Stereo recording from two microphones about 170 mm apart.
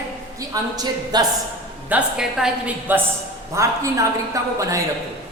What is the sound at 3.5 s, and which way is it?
A man's voice, 20° right (ahead or behind).